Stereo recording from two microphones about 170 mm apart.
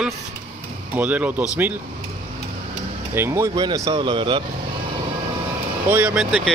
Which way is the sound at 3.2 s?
15° right (ahead or behind).